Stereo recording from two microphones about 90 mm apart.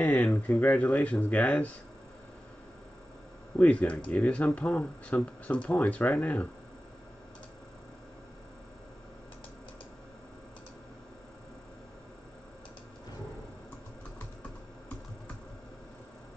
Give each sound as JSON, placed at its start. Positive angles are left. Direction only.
{"t": 0.0, "sound": "speech", "side_deg": 20}
{"t": 3.5, "sound": "speech", "side_deg": 15}